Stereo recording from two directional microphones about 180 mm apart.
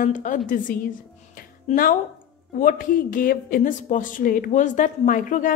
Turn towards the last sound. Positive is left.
turn(degrees=50)  # may be behind; listen again after turning